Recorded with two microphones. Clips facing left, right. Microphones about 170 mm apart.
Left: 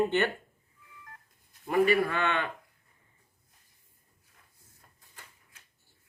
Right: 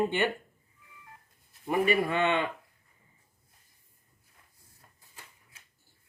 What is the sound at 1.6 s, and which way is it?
Speech, 20° right (ahead or behind).